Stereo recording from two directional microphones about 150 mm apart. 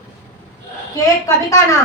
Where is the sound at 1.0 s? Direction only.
20° left (ahead or behind).